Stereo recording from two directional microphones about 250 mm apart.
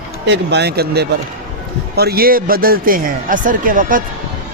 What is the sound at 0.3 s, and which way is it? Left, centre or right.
Speech, right.